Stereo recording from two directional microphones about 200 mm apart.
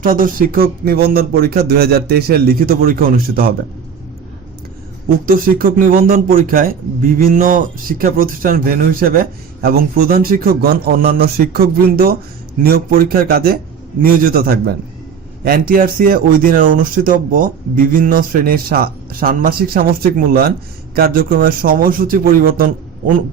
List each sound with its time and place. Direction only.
0.0 s speech: 45° right (ahead or behind)
5.0 s speech: 45° right (ahead or behind)